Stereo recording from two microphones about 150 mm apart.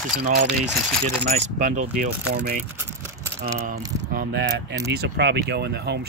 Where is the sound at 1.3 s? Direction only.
55° right (ahead or behind).